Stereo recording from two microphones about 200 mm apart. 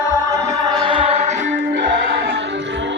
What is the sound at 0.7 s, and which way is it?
Music, 25° right (ahead or behind).